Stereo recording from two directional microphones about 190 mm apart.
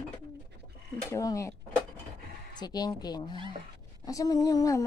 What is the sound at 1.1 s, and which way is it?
Speech, 15° left (ahead or behind).